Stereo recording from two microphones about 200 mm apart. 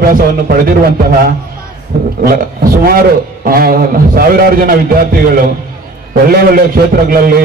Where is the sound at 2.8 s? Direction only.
45° right (ahead or behind).